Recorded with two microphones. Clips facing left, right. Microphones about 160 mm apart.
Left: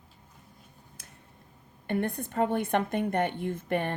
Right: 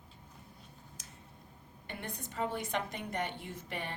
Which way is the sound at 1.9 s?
55° left (ahead or behind).